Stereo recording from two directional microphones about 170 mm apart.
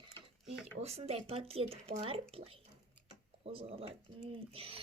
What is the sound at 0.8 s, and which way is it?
Speech, 40° right (ahead or behind).